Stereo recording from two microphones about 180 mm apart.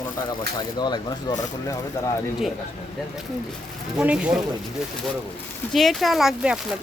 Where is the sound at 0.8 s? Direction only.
25° left (ahead or behind).